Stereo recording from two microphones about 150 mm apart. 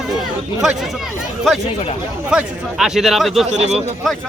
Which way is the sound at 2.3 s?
Centre (ahead or behind).